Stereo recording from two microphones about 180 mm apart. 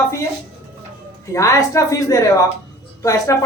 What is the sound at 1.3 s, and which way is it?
A woman's voice, 20° left (ahead or behind).